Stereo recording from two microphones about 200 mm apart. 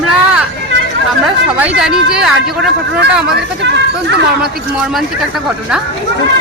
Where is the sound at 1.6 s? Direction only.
5° right (ahead or behind).